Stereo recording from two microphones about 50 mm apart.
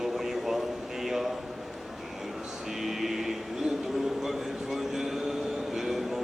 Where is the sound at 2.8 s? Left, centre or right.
Centre.